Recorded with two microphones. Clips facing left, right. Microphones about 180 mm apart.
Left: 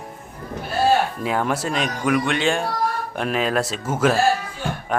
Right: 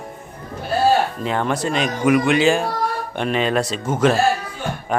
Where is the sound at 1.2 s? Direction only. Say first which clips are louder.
Right 1 dB; 5° left (ahead or behind).